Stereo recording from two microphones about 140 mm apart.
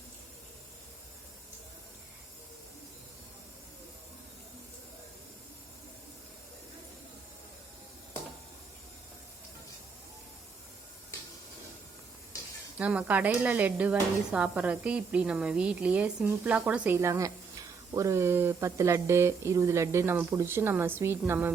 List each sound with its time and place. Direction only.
12.8 s speech: 10° right (ahead or behind)